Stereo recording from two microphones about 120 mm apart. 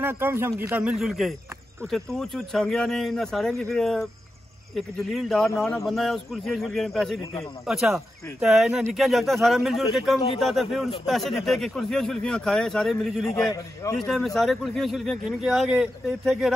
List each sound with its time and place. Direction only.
0.0 s a man's voice: 20° right (ahead or behind)
0.9 s speech: centre (ahead or behind)
13.4 s a man's voice: 30° left (ahead or behind)
13.9 s speech: 5° left (ahead or behind)